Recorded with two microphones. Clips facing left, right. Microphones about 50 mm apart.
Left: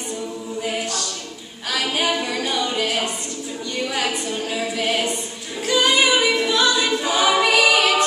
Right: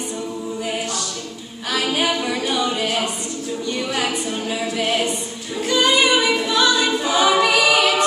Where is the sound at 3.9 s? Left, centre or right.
Centre.